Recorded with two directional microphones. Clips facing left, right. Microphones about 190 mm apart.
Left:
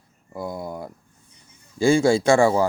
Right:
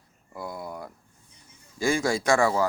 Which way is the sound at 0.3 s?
20° left (ahead or behind).